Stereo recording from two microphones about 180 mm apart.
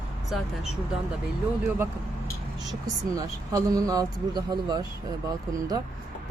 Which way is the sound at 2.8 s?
20° right (ahead or behind).